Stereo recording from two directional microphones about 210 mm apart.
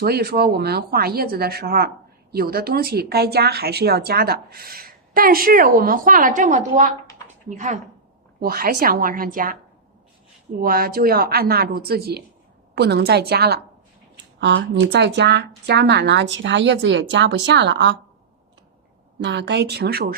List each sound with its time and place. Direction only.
0.0 s speech: 50° right (ahead or behind)
8.4 s speech: 45° right (ahead or behind)
10.6 s a woman's voice: 45° right (ahead or behind)
19.2 s speech: 55° right (ahead or behind)